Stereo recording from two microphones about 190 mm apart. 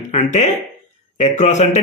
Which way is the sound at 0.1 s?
40° left (ahead or behind).